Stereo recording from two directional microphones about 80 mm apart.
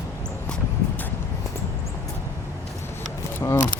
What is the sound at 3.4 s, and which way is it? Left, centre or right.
Speech, left.